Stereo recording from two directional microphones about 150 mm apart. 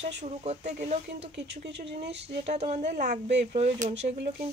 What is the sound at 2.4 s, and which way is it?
Speech, 45° right (ahead or behind).